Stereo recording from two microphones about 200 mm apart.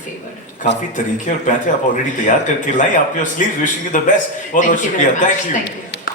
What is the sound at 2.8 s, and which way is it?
A man's voice, 40° left (ahead or behind).